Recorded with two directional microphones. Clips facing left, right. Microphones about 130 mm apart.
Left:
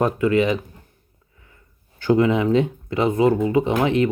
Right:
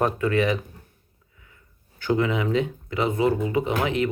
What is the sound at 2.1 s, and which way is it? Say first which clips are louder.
Speech: left 6 dB; 30° left (ahead or behind).